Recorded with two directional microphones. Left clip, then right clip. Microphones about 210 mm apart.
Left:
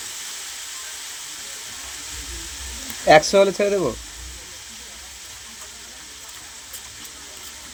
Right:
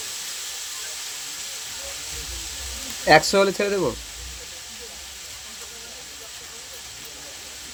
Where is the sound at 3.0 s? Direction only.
Centre (ahead or behind).